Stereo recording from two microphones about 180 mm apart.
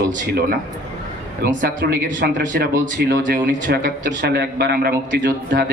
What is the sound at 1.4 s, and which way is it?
Speech, 65° right (ahead or behind).